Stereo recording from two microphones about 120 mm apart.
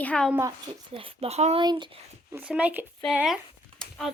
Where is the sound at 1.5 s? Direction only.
40° right (ahead or behind).